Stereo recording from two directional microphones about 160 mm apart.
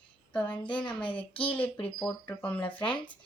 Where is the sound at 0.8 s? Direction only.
30° left (ahead or behind).